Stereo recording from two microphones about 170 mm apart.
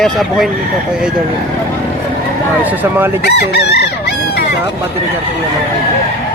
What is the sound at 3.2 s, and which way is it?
Chicken, 75° left (ahead or behind).